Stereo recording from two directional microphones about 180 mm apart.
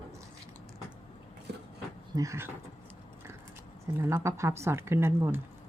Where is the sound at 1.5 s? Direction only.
65° right (ahead or behind).